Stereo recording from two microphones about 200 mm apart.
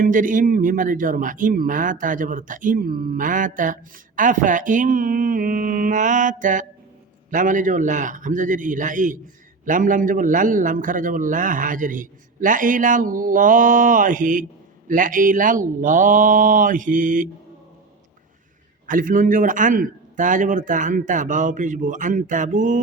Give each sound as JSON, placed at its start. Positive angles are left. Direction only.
{"t": 0.0, "sound": "a man's voice", "side_deg": -40}
{"t": 18.9, "sound": "a man's voice", "side_deg": -45}